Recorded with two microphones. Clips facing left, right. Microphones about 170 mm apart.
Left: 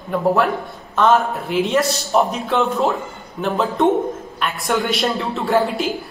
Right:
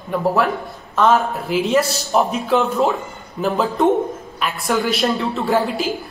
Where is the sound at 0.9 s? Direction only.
Centre (ahead or behind).